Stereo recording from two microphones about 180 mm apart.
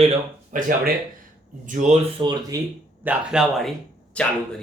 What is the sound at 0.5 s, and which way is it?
Speech, 50° right (ahead or behind).